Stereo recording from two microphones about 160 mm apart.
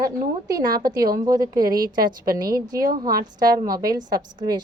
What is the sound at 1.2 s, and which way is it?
Speech, 25° right (ahead or behind).